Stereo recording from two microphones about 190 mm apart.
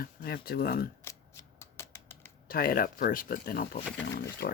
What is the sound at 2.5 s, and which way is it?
Speech, 50° left (ahead or behind).